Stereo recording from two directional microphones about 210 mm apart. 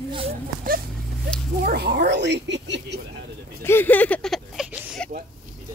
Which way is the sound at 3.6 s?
10° left (ahead or behind).